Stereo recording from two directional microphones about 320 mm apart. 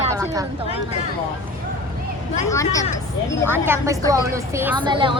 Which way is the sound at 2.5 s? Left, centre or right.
Centre.